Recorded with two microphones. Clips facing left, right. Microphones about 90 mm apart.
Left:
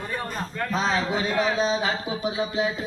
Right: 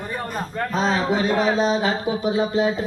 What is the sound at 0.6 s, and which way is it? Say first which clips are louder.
A man's voice: right 3 dB; 40° right (ahead or behind).